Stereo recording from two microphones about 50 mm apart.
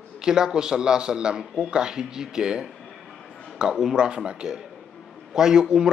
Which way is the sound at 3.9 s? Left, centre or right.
Centre.